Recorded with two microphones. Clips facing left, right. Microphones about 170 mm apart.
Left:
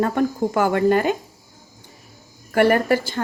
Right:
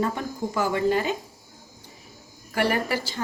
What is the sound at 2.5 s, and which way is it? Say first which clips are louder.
Speech: left 8 dB; 55° left (ahead or behind).